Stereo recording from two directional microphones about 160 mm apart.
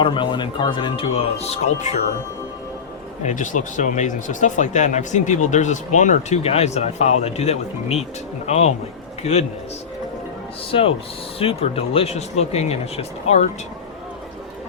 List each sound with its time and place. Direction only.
0.0 s speech: 30° left (ahead or behind); by 2.0 s 45° left (ahead or behind)
3.2 s speech: 55° left (ahead or behind)
10.7 s speech: 35° left (ahead or behind)